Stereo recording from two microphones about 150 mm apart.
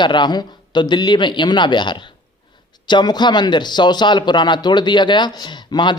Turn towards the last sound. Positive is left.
turn(degrees=30)  # may be behind; listen again after turning